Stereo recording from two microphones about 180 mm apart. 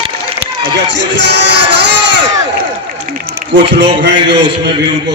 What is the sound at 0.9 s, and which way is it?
Music, 75° right (ahead or behind).